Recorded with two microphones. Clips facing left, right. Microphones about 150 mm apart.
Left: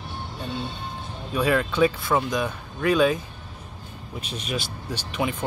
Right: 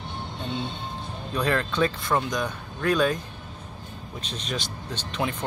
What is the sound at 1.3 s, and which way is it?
Speech, 5° left (ahead or behind).